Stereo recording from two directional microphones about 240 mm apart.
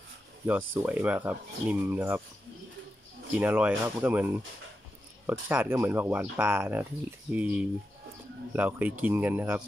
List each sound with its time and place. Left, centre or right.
0.5 s speech: centre
3.3 s speech: centre